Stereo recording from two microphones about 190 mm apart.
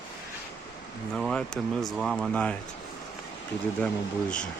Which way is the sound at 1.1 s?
5° left (ahead or behind).